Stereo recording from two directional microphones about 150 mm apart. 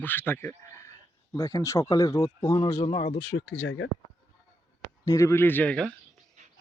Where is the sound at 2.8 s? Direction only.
40° left (ahead or behind).